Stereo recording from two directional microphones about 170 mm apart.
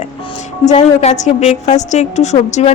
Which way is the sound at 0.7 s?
45° left (ahead or behind).